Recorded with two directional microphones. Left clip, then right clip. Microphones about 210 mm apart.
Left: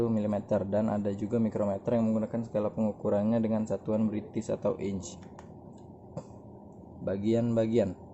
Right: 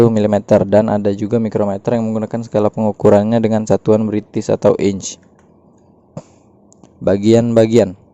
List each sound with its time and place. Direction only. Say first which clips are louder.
0.0 s a man's voice: right 18 dB; 45° right (ahead or behind)
6.2 s a sound: right 9 dB; 35° right (ahead or behind)
7.0 s a man's voice: right 17 dB; 50° right (ahead or behind)